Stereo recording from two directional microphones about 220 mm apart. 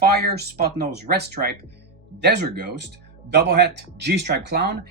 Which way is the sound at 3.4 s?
50° right (ahead or behind).